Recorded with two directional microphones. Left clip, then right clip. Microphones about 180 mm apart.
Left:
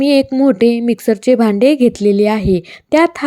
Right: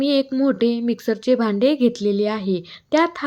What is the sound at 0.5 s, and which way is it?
Speech, 40° left (ahead or behind).